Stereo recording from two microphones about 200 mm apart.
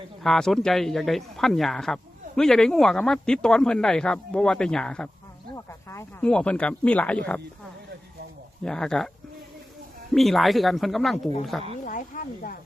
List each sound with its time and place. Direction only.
0.2 s speech: centre (ahead or behind)
5.5 s speech: 15° left (ahead or behind)
8.6 s speech: 5° left (ahead or behind)
10.2 s speech: centre (ahead or behind)
11.9 s speech: 40° left (ahead or behind)